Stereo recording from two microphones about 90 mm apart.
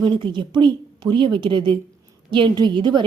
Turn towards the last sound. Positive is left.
turn(degrees=-60)  # may be behind; listen again after turning